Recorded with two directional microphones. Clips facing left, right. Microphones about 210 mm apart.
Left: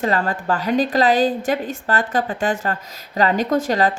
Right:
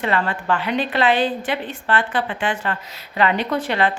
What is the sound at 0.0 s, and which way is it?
A woman's voice, 40° left (ahead or behind).